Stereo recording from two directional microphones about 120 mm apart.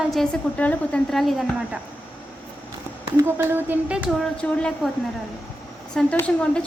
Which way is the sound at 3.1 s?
20° right (ahead or behind).